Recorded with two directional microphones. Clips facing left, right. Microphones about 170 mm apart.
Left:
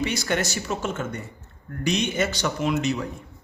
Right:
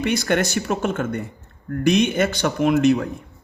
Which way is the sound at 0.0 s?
55° right (ahead or behind).